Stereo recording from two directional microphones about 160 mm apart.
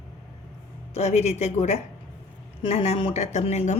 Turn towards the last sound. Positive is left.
turn(degrees=45)  # may be behind; listen again after turning